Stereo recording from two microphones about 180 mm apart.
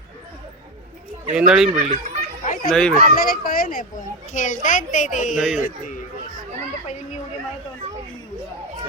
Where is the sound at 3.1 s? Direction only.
50° left (ahead or behind).